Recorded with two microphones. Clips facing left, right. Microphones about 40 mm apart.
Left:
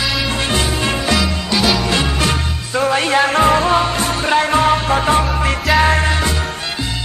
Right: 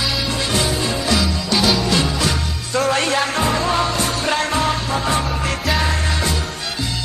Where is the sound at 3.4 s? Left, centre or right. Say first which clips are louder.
Left 6 dB; left.